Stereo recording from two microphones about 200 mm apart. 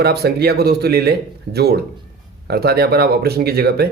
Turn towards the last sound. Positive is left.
turn(degrees=-50)  # may be behind; listen again after turning